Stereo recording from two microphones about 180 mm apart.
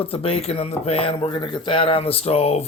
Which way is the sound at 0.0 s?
30° left (ahead or behind).